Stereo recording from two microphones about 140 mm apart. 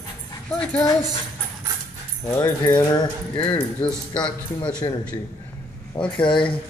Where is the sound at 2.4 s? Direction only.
30° left (ahead or behind).